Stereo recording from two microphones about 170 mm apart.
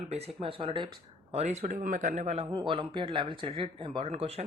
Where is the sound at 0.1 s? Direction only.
35° right (ahead or behind).